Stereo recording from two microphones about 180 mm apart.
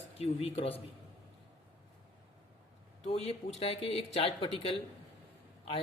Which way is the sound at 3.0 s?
35° left (ahead or behind).